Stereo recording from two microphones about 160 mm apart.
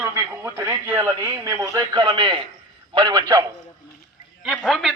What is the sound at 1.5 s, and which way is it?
A man's voice, 20° right (ahead or behind).